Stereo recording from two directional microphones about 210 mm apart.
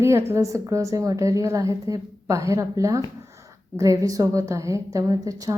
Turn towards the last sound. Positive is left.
turn(degrees=-15)  # may be behind; listen again after turning